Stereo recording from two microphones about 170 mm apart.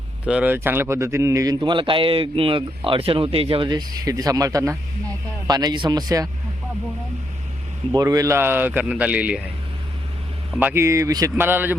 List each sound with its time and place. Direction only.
0.3 s speech: 10° right (ahead or behind)
7.9 s speech: 20° right (ahead or behind)
10.6 s speech: 10° right (ahead or behind)